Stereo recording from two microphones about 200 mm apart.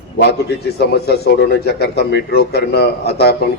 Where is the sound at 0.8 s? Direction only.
55° left (ahead or behind).